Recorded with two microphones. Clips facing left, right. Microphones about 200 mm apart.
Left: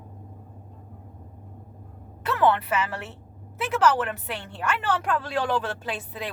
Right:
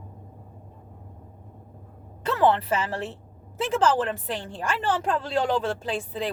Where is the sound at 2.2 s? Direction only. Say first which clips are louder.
Right 1 dB; 25° right (ahead or behind).